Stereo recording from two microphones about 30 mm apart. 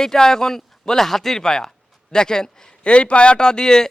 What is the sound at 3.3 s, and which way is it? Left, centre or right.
Speech, left.